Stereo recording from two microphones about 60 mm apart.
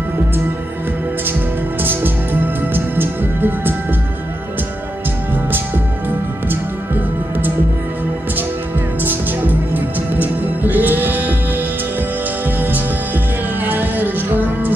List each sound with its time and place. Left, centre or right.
1.8 s music: right
6.0 s music: right
9.0 s music: right